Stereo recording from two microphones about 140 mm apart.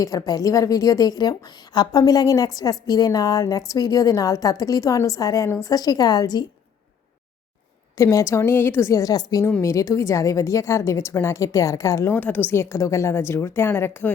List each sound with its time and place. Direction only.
0.0 s a woman's voice: 25° left (ahead or behind)
7.9 s a woman's voice: 20° left (ahead or behind)
12.1 s a woman's voice: 10° left (ahead or behind)